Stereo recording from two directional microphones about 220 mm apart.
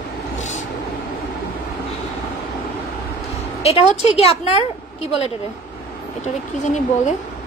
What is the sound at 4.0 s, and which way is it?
Speech, 30° left (ahead or behind).